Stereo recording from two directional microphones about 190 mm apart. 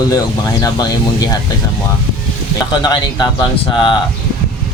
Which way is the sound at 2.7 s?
20° left (ahead or behind).